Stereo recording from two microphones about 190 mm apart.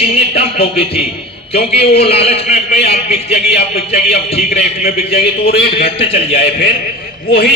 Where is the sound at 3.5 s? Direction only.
55° left (ahead or behind).